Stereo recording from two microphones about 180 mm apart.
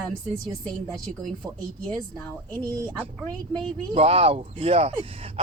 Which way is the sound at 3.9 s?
35° right (ahead or behind).